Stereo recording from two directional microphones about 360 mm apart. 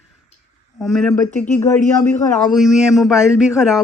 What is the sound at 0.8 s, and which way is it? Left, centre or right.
Speech, centre.